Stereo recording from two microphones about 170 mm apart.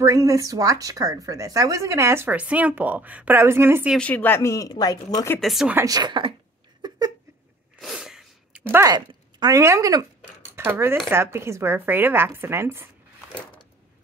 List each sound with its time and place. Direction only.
0.0 s speech: 20° right (ahead or behind)
3.9 s speech: 10° left (ahead or behind)
5.4 s speech: centre (ahead or behind)
5.8 s speech: 20° right (ahead or behind)
6.8 s a sound: 25° right (ahead or behind)
7.8 s sneeze: centre (ahead or behind)
8.6 s speech: 15° right (ahead or behind)
13.3 s a sound: 25° left (ahead or behind)